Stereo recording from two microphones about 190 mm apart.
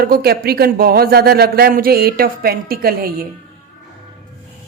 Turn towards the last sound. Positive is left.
turn(degrees=-50)  # may be behind; listen again after turning